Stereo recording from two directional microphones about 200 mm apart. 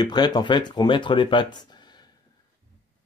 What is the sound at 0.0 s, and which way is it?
Speech, 20° left (ahead or behind).